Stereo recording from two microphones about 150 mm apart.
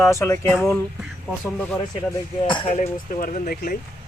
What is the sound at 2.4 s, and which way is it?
Speech, 35° left (ahead or behind).